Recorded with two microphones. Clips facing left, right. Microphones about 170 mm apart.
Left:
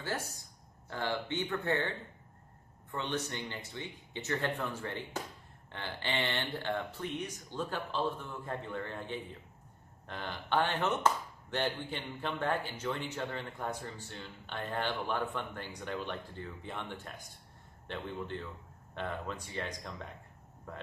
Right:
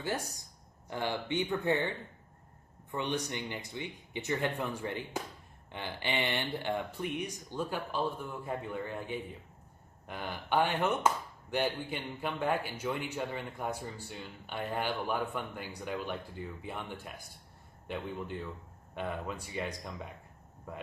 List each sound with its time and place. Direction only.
0.0 s speech: 15° right (ahead or behind)